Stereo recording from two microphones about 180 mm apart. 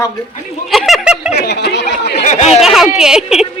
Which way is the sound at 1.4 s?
60° left (ahead or behind).